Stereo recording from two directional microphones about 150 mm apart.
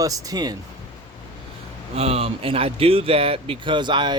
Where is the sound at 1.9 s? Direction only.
45° right (ahead or behind).